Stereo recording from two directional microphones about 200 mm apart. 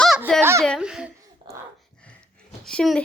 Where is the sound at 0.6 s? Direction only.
Centre (ahead or behind).